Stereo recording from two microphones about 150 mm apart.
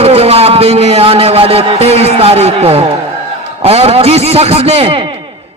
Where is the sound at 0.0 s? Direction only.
40° right (ahead or behind).